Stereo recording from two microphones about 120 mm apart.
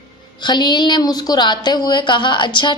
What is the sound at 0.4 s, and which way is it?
A woman's voice, 40° left (ahead or behind).